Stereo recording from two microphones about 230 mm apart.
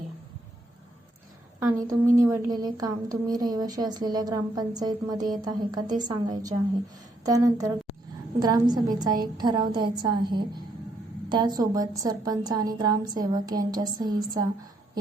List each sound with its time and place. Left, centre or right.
1.9 s a woman's voice: centre